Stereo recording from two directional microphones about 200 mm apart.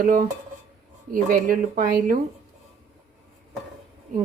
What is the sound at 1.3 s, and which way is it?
Speech, 45° right (ahead or behind).